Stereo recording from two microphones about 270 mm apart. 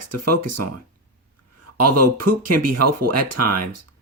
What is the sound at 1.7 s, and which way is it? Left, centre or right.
Speech, right.